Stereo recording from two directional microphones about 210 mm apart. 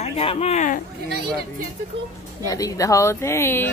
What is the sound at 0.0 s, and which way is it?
Speech, 30° left (ahead or behind).